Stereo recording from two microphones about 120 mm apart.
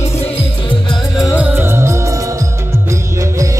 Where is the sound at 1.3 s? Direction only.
15° right (ahead or behind).